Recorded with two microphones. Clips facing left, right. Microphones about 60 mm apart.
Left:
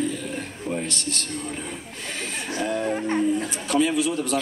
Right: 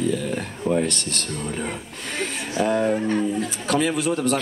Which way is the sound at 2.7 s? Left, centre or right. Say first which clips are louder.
Right 4 dB; right.